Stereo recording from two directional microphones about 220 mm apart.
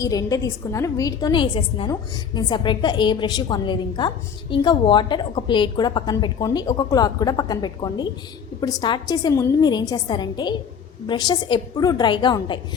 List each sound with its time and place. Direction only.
0.0 s a woman's voice: 15° left (ahead or behind)